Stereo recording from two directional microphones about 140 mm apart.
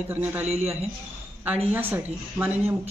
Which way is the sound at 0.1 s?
15° right (ahead or behind).